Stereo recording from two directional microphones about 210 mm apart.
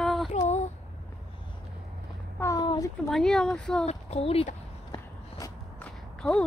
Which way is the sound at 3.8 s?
30° left (ahead or behind).